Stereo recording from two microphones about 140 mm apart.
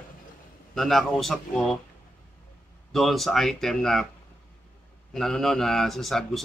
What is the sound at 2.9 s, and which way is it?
Speech, centre (ahead or behind).